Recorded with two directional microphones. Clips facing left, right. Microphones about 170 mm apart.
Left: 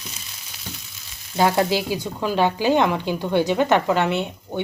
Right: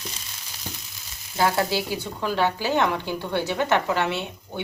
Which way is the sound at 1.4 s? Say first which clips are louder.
Left 4 dB; 20° left (ahead or behind).